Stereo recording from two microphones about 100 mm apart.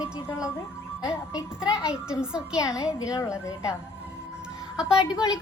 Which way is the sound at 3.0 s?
35° left (ahead or behind).